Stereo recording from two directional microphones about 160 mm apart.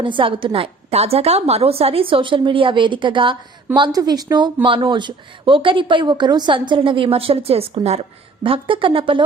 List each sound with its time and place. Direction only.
0.0 s speech: 30° right (ahead or behind)